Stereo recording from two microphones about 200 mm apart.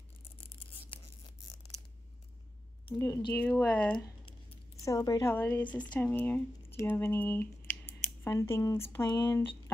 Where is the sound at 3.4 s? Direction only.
10° left (ahead or behind).